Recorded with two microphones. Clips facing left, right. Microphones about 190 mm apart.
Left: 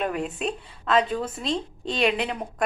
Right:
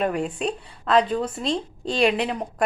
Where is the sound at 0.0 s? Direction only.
Centre (ahead or behind).